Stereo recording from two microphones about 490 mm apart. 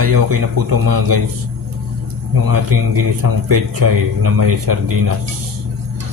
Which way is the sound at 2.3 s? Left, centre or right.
Right.